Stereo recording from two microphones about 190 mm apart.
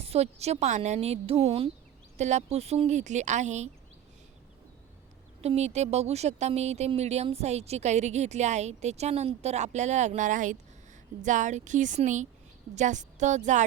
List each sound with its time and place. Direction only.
0.0 s speech: 35° right (ahead or behind)
5.4 s speech: 35° right (ahead or behind)